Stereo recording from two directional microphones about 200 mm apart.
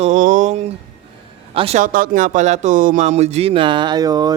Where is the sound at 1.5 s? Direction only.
30° right (ahead or behind).